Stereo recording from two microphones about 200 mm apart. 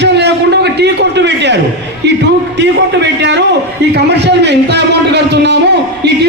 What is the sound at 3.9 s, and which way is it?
A man's voice, 60° right (ahead or behind).